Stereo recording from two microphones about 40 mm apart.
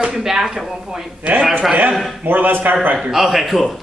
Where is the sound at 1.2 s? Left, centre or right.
Right.